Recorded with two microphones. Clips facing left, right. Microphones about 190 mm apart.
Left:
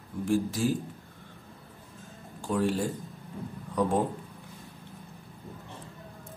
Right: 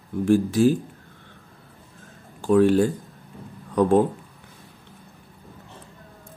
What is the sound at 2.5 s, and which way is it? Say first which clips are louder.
Speech: right 11 dB; 70° right (ahead or behind).